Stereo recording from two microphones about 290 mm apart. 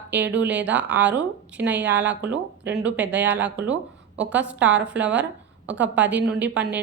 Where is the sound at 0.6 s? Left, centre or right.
Centre.